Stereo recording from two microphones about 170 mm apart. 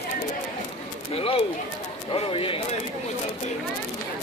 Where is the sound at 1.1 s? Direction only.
30° left (ahead or behind).